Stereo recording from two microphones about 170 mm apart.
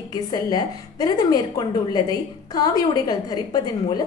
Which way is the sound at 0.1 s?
25° left (ahead or behind).